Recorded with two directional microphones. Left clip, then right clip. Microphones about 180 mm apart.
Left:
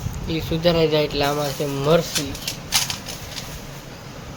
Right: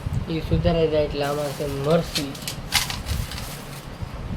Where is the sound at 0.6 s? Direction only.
20° left (ahead or behind).